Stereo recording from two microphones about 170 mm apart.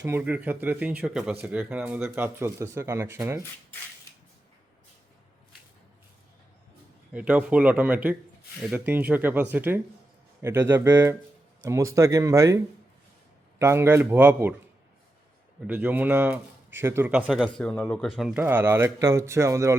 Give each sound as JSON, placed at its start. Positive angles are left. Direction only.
{"t": 0.0, "sound": "speech", "side_deg": -10}
{"t": 7.1, "sound": "speech", "side_deg": -10}
{"t": 13.6, "sound": "speech", "side_deg": -15}
{"t": 15.6, "sound": "speech", "side_deg": -10}
{"t": 18.4, "sound": "speech", "side_deg": -10}